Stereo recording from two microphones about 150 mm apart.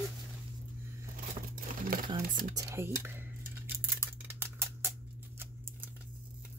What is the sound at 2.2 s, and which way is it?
Speech, 70° right (ahead or behind).